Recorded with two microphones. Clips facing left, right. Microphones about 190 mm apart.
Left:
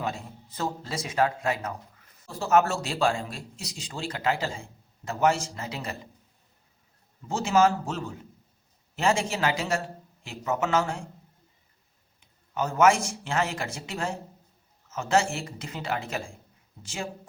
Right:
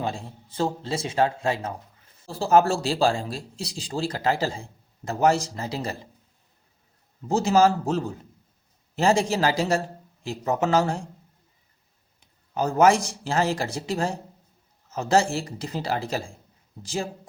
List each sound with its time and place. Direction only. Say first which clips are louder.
0.0 s speech: right 3 dB; 30° right (ahead or behind)
7.3 s speech: right 3 dB; 35° right (ahead or behind)
12.5 s speech: right 3 dB; 35° right (ahead or behind)